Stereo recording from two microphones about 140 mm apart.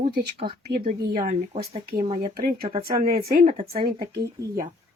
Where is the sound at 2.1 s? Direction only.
50° right (ahead or behind); by 2.7 s 65° right (ahead or behind).